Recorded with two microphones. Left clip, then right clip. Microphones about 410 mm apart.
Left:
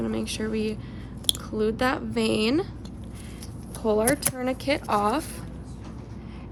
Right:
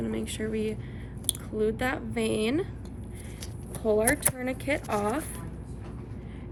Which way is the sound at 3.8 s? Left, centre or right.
Left.